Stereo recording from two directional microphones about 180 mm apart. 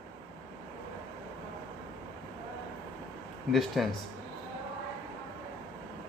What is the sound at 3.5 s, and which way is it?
Speech, centre (ahead or behind).